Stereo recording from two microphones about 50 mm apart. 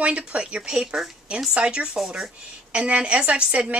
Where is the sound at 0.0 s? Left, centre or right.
Right.